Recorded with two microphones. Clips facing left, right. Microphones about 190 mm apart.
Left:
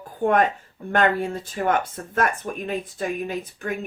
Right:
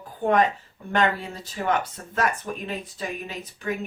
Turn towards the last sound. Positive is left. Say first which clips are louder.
# left 3 dB
turn(degrees=50)  # may be behind; listen again after turning